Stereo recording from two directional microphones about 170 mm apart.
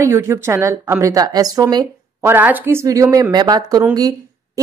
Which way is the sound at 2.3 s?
10° right (ahead or behind).